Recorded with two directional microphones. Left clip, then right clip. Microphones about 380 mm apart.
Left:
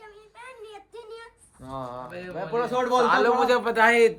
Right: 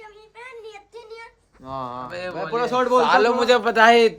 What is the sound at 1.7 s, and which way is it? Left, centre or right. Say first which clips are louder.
Speech: right 5 dB; right.